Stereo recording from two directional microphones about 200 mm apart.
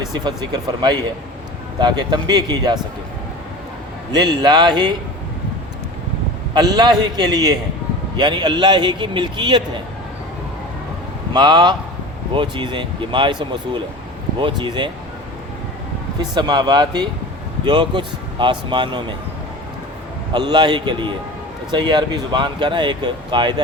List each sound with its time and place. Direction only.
0.1 s speech: 20° right (ahead or behind)
4.1 s speech: 20° right (ahead or behind)
6.5 s a man's voice: 20° right (ahead or behind)
11.3 s speech: 20° right (ahead or behind)
14.3 s speech: 25° right (ahead or behind)
16.3 s speech: 20° right (ahead or behind)
20.3 s speech: 20° right (ahead or behind)